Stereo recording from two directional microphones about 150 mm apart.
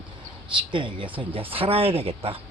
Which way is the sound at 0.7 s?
35° right (ahead or behind).